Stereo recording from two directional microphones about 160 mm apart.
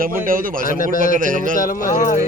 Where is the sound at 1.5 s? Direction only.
55° left (ahead or behind).